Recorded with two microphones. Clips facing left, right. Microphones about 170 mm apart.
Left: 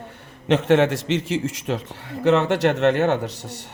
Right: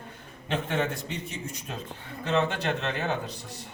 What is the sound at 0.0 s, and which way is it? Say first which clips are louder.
A man's voice: left 6 dB; 75° left (ahead or behind).